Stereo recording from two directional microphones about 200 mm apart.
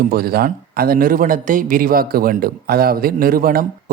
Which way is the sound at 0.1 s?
50° right (ahead or behind).